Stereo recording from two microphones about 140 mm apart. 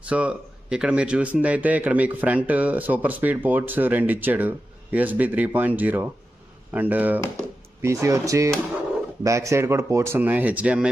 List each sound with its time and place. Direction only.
0.0 s speech: 10° right (ahead or behind)